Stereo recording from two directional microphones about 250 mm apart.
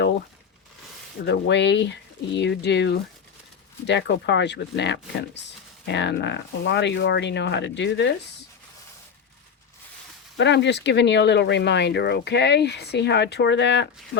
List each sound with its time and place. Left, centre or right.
1.2 s speech: left
10.3 s speech: left